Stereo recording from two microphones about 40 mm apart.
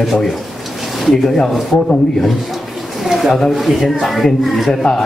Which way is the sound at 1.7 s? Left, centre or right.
Left.